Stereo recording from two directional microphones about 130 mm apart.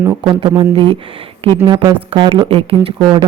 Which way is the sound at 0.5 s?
35° right (ahead or behind).